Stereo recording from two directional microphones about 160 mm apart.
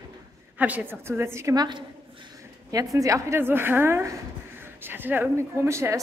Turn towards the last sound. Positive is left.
turn(degrees=-15)  # may be behind; listen again after turning